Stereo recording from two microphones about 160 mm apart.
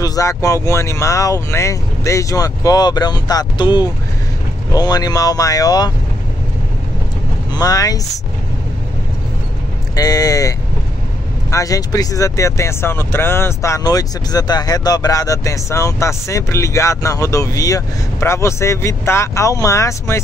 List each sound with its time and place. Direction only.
0.0 s speech: 20° left (ahead or behind)
7.5 s speech: 25° left (ahead or behind)
9.9 s speech: 25° left (ahead or behind)
11.5 s speech: 20° left (ahead or behind)